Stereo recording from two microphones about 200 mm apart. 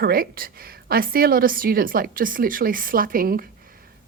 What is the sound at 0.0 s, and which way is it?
Speech, 50° right (ahead or behind).